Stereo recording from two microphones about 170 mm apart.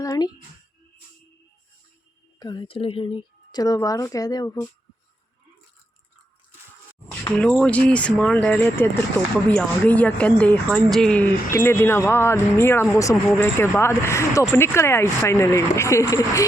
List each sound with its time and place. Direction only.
0.0 s speech: 20° left (ahead or behind)
2.4 s speech: 25° left (ahead or behind)
7.3 s speech: 5° left (ahead or behind)